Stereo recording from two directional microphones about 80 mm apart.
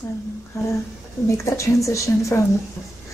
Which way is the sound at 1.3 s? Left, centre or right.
Left.